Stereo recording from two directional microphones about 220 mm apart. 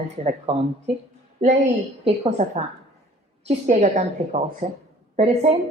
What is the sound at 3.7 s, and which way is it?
A woman's voice, 30° right (ahead or behind).